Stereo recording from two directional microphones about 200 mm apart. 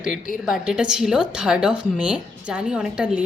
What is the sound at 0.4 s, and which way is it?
A woman's voice, 5° right (ahead or behind).